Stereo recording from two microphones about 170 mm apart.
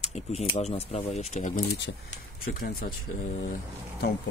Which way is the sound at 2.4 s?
60° left (ahead or behind).